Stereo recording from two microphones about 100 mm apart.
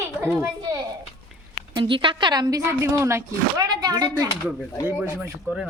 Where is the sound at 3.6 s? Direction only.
40° right (ahead or behind).